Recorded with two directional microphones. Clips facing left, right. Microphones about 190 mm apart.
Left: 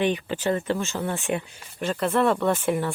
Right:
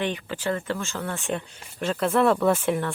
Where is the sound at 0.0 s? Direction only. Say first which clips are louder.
Left 4 dB; 20° left (ahead or behind).